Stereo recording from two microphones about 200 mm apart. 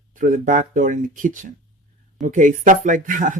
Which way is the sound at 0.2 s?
40° right (ahead or behind).